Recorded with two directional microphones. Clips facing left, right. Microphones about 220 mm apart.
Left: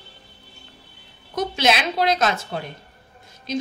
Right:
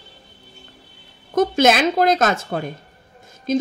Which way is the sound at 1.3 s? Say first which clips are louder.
Right 6 dB; 50° right (ahead or behind).